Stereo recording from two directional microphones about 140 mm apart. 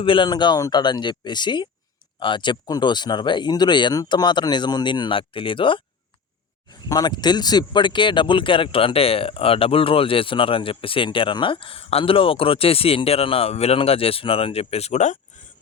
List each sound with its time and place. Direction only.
0.0 s speech: 35° left (ahead or behind)
6.8 s speech: 30° left (ahead or behind); by 15.2 s 55° left (ahead or behind)